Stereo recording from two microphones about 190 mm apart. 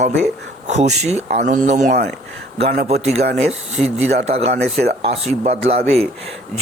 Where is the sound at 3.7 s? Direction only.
35° right (ahead or behind).